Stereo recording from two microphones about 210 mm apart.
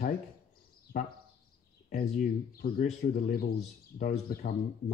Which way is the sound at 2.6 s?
45° left (ahead or behind).